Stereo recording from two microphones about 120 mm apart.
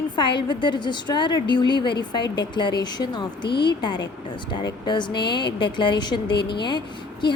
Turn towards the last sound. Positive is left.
turn(degrees=40)  # may be behind; listen again after turning